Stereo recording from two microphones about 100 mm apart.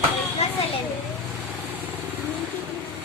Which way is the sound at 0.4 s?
90° left.